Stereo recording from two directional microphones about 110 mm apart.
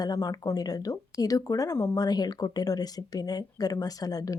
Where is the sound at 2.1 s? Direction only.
40° left (ahead or behind).